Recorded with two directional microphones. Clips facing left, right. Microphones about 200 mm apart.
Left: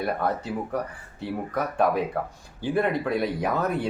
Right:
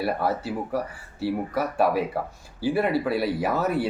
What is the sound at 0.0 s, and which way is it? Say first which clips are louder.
Speech: right 1 dB; 5° right (ahead or behind).